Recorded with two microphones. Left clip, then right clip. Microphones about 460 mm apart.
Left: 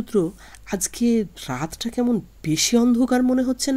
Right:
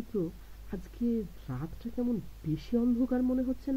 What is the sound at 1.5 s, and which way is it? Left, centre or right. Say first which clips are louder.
Speech: left 14 dB; centre.